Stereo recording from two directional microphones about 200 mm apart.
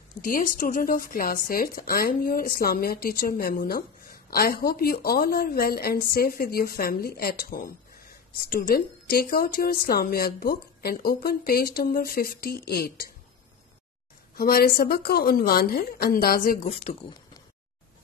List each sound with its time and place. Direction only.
0.2 s speech: 45° left (ahead or behind)
14.3 s speech: 50° left (ahead or behind)
16.6 s speech: 30° left (ahead or behind)